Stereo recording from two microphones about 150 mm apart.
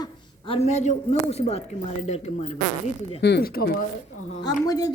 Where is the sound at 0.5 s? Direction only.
45° left (ahead or behind).